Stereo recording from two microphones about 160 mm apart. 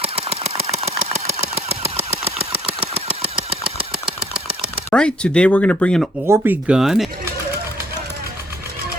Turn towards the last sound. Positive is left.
turn(degrees=0)  # may be behind; listen again after turning